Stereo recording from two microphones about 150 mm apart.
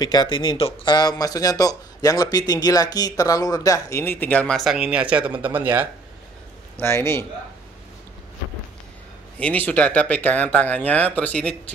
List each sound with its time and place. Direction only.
0.0 s speech: 30° left (ahead or behind); by 5.9 s 10° right (ahead or behind)
6.8 s speech: 15° left (ahead or behind)
9.4 s speech: 10° left (ahead or behind)